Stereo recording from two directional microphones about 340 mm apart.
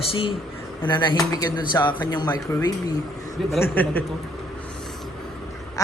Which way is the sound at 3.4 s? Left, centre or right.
Centre.